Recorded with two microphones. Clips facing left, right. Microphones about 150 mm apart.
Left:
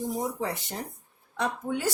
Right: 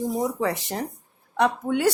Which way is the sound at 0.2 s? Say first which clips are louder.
Right 6 dB; 90° right.